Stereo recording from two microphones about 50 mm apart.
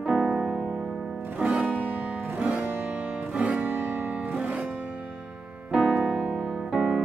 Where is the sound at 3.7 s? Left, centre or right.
Right.